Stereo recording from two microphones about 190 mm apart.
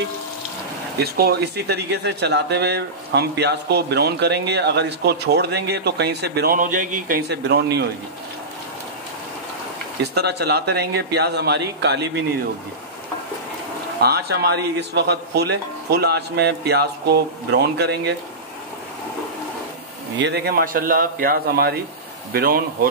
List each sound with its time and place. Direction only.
0.9 s speech: 55° right (ahead or behind)
10.1 s speech: 60° right (ahead or behind)
14.0 s speech: 60° right (ahead or behind)
20.2 s speech: 60° right (ahead or behind)